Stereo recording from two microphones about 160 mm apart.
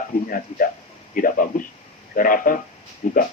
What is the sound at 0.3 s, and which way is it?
Speech, 60° left (ahead or behind).